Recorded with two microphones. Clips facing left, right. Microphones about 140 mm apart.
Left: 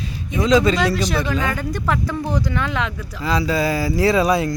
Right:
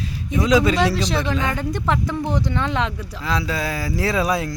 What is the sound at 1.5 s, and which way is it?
Speech, 25° right (ahead or behind).